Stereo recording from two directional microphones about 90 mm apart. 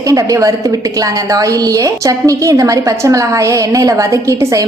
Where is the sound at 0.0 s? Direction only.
40° right (ahead or behind).